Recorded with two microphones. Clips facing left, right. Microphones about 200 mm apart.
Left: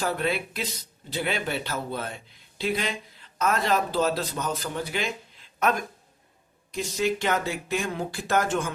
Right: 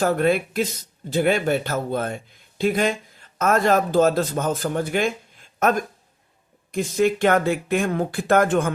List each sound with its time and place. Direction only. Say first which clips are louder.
0.0 s speech: right 8 dB; 50° right (ahead or behind)